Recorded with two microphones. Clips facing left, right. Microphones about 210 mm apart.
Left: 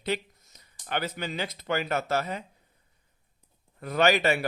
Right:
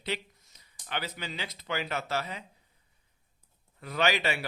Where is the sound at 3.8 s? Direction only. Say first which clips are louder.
Left 5 dB; 45° left (ahead or behind).